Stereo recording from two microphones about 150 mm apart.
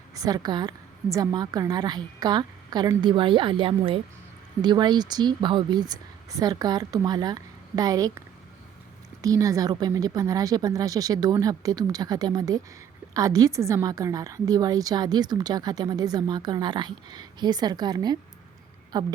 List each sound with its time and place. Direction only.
0.1 s a woman's voice: 25° right (ahead or behind)
9.2 s a woman's voice: 25° right (ahead or behind)